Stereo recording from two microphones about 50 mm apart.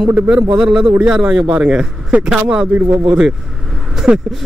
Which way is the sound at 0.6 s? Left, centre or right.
Centre.